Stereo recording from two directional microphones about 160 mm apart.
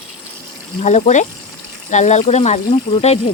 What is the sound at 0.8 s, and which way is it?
Speech, 45° left (ahead or behind).